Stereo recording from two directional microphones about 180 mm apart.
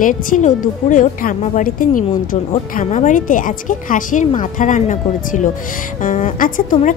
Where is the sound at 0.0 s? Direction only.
45° left (ahead or behind).